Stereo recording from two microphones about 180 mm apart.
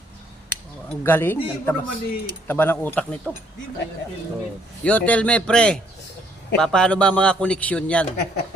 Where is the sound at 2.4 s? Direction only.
10° left (ahead or behind).